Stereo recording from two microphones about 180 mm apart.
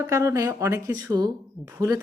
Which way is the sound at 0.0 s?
15° right (ahead or behind).